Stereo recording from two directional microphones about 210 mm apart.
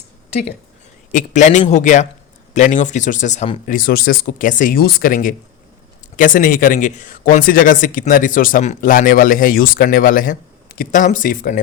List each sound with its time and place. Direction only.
1.1 s speech: 35° left (ahead or behind)
3.8 s speech: 45° left (ahead or behind)